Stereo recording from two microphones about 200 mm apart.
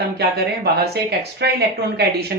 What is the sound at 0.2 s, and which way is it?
Speech, 55° right (ahead or behind).